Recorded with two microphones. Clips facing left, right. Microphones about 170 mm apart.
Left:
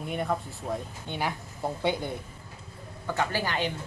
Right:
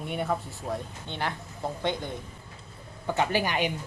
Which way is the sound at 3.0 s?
20° right (ahead or behind).